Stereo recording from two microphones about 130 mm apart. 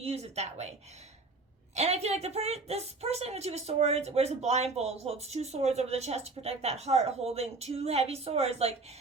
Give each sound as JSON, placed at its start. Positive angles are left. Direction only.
{"t": 0.0, "sound": "a woman's voice", "side_deg": -55}
{"t": 1.7, "sound": "a woman's voice", "side_deg": -55}